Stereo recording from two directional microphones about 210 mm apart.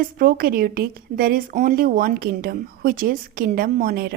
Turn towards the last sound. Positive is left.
turn(degrees=-45)  # may be behind; listen again after turning